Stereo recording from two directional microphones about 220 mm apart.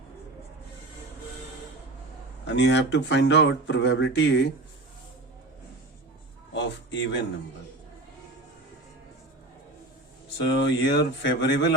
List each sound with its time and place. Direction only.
2.5 s speech: 55° left (ahead or behind)
6.5 s a sound: 55° left (ahead or behind)
10.3 s speech: 50° left (ahead or behind)